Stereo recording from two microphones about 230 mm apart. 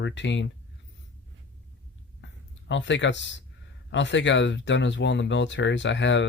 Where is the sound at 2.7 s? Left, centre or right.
Left.